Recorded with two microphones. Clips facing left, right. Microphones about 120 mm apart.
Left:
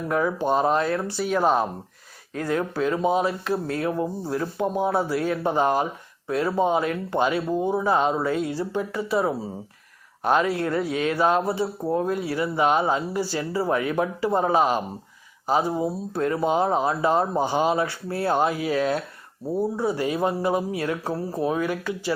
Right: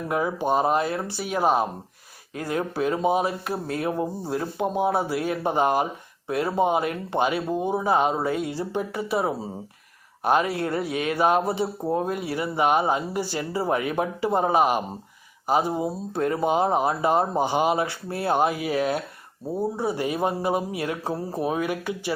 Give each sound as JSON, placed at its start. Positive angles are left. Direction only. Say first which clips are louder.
{"t": 0.1, "sound": "speech", "louder": "left 1 dB", "side_deg": -15}
{"t": 5.1, "sound": "speech", "louder": "left 2 dB", "side_deg": 40}
{"t": 5.4, "sound": "speech", "louder": "right 1 dB", "side_deg": -15}
{"t": 10.6, "sound": "speech", "louder": "left 2 dB", "side_deg": -35}
{"t": 10.8, "sound": "speech", "louder": "right 1 dB", "side_deg": -15}